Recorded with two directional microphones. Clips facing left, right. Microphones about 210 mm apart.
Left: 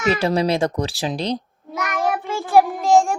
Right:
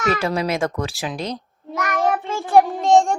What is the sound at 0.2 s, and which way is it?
Speech, 30° left (ahead or behind).